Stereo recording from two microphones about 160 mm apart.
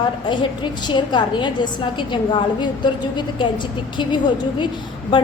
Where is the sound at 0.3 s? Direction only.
30° left (ahead or behind).